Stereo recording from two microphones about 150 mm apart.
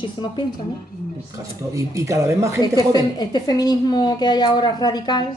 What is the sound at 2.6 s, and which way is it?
A woman's voice, 25° left (ahead or behind).